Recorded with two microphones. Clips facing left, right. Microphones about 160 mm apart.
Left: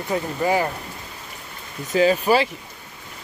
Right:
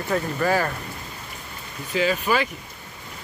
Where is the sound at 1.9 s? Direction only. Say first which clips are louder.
Left 5 dB; 35° left (ahead or behind).